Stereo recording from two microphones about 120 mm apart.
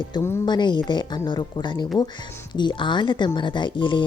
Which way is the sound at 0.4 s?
40° left (ahead or behind).